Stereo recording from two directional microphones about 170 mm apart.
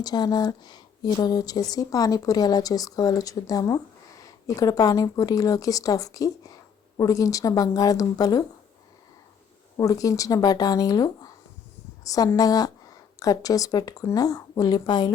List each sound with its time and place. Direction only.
0.0 s speech: 25° left (ahead or behind)
9.7 s speech: 20° left (ahead or behind)